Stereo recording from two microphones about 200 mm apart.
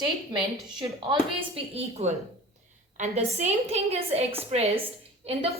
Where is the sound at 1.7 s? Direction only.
30° right (ahead or behind).